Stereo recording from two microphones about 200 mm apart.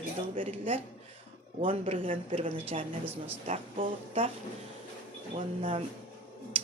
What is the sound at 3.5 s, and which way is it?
Speech, 25° right (ahead or behind).